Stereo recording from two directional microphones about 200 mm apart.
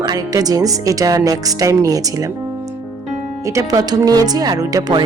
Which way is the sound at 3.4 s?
20° right (ahead or behind).